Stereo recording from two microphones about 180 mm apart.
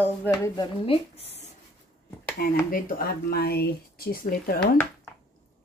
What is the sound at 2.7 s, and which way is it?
Speech, 55° left (ahead or behind).